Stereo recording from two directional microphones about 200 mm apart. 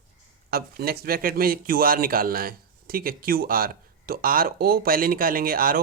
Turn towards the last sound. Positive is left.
turn(degrees=-45)  # may be behind; listen again after turning